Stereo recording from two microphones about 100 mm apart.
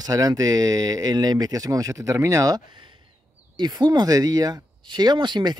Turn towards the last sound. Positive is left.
turn(degrees=-50)  # may be behind; listen again after turning